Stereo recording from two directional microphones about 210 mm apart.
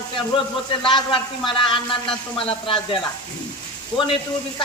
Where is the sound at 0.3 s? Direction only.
25° left (ahead or behind).